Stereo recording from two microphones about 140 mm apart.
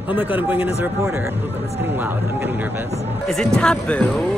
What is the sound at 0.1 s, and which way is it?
A man's voice, 15° right (ahead or behind).